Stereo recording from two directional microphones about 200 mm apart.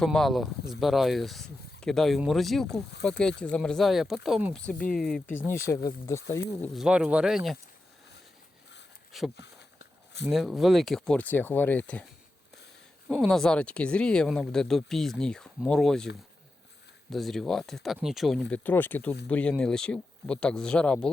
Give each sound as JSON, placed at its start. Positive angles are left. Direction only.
{"t": 0.0, "sound": "speech", "side_deg": 0}
{"t": 4.8, "sound": "speech", "side_deg": 45}
{"t": 5.0, "sound": "speech", "side_deg": 5}
{"t": 6.6, "sound": "speech", "side_deg": -5}
{"t": 9.1, "sound": "speech", "side_deg": 0}
{"t": 13.2, "sound": "speech", "side_deg": 0}
{"t": 17.1, "sound": "speech", "side_deg": 0}